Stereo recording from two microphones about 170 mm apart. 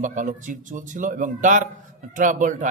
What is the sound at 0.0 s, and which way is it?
A man's voice, 50° right (ahead or behind).